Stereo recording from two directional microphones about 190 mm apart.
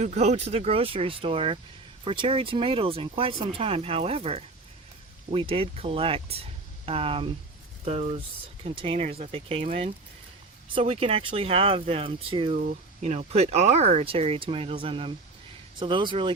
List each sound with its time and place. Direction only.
0.0 s speech: 35° right (ahead or behind)
10.8 s speech: 30° right (ahead or behind)